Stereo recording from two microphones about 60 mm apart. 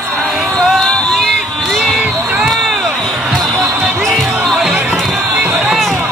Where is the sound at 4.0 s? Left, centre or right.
Centre.